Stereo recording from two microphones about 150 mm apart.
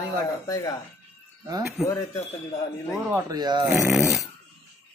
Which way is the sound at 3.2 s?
30° right (ahead or behind).